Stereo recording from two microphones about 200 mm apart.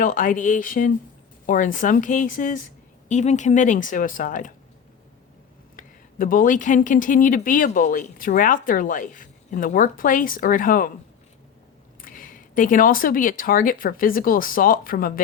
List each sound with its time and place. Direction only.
0.0 s a woman's voice: 40° left (ahead or behind)
5.7 s speech: 45° left (ahead or behind)
12.0 s speech: 45° left (ahead or behind)